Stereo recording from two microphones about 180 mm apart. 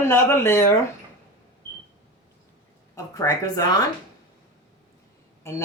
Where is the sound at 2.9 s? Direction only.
20° left (ahead or behind).